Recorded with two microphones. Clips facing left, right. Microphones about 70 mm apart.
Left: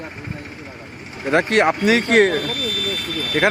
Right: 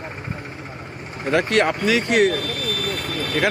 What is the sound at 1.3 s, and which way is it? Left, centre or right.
Speech, left.